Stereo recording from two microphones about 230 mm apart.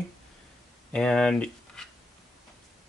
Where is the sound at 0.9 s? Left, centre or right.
Centre.